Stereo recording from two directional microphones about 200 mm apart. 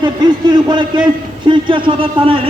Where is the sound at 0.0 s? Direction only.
20° right (ahead or behind).